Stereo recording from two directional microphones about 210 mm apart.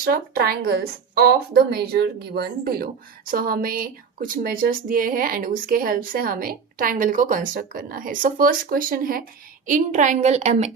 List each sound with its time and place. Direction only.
0.0 s a woman's voice: 45° right (ahead or behind)